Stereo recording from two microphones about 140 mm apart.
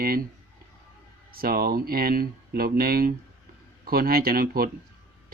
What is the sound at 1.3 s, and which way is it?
Speech, 90° right.